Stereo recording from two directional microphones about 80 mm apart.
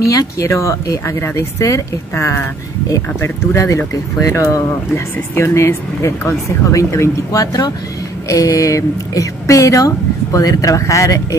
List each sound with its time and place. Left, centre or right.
0.0 s speech: left